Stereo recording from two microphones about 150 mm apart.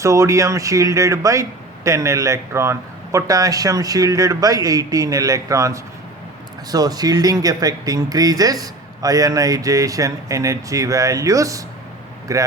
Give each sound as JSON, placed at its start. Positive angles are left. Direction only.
{"t": 0.0, "sound": "a man's voice", "side_deg": -20}